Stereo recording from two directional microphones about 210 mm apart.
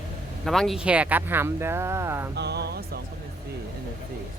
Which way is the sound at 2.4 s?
50° right (ahead or behind).